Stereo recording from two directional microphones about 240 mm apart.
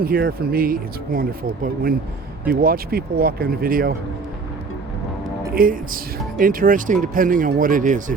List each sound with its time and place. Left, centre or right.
0.0 s speech: right
2.5 s speech: right
5.5 s speech: right